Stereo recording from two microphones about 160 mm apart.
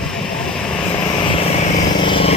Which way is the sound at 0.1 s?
5° left (ahead or behind).